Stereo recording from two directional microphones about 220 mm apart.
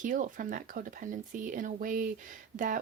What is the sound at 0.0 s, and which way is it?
Speech, 35° right (ahead or behind).